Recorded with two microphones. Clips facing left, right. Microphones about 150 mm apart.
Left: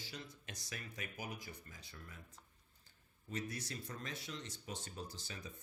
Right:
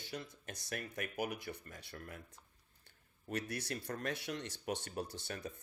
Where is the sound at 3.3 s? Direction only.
70° right (ahead or behind).